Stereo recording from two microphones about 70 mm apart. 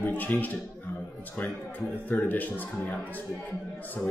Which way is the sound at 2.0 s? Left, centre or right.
Left.